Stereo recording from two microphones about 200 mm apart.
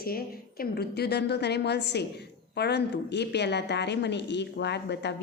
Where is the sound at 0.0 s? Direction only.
50° left (ahead or behind).